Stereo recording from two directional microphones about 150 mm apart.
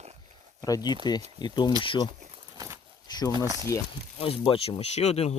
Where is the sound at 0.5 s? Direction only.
25° left (ahead or behind).